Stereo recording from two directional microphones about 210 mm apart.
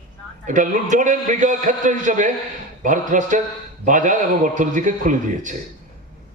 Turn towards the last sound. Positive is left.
turn(degrees=-40)  # may be behind; listen again after turning